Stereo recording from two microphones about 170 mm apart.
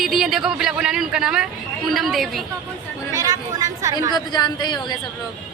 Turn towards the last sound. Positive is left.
turn(degrees=25)  # may be behind; listen again after turning